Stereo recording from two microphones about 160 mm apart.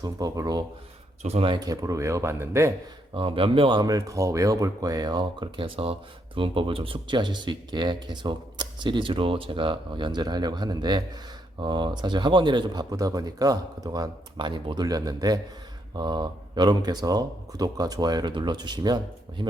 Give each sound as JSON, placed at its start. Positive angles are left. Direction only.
{"t": 0.0, "sound": "speech", "side_deg": -20}
{"t": 1.2, "sound": "speech", "side_deg": -40}
{"t": 3.2, "sound": "speech", "side_deg": -35}